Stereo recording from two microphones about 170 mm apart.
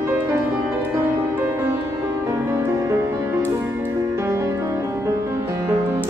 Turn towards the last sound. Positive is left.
turn(degrees=-15)  # may be behind; listen again after turning